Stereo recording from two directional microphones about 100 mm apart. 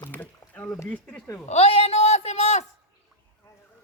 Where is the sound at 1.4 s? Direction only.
90° left.